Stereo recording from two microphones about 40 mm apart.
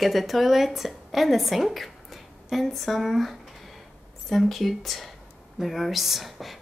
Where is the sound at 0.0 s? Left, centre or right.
Centre.